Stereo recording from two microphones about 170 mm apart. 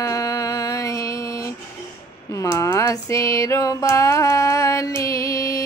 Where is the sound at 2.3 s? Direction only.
20° left (ahead or behind).